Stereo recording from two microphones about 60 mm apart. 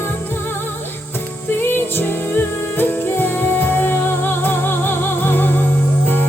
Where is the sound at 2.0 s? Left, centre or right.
Left.